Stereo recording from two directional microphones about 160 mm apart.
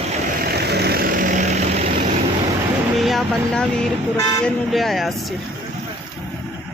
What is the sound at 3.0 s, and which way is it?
Speech, centre (ahead or behind).